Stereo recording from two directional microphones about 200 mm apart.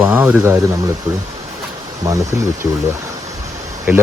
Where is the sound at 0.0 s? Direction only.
5° right (ahead or behind).